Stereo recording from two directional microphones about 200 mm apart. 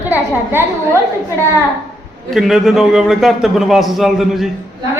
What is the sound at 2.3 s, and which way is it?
A man's voice, centre (ahead or behind).